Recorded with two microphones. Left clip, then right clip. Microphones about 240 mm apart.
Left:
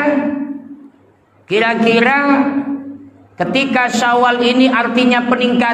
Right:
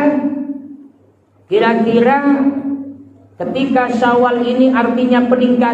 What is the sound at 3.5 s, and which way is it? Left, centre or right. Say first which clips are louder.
A man's voice: even; left.